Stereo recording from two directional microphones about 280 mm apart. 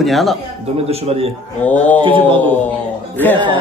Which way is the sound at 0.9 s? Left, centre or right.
Right.